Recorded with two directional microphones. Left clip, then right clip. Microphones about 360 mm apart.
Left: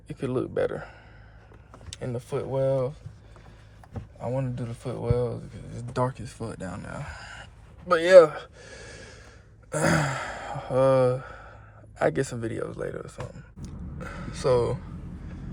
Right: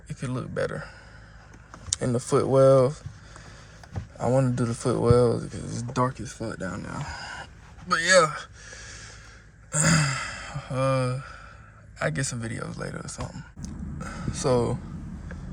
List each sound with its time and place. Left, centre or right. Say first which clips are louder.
0.1 s speech: left 5 dB; centre
1.9 s speech: right 7 dB; centre
4.2 s speech: right 7 dB; centre
5.9 s speech: right 1 dB; centre
7.0 s a sound: right 5 dB; centre
7.9 s speech: left 5 dB; centre
9.7 s gasp: even; centre
11.9 s speech: left 4 dB; centre